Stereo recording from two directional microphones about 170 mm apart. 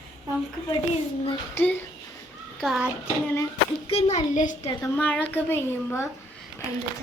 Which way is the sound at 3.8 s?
40° left (ahead or behind).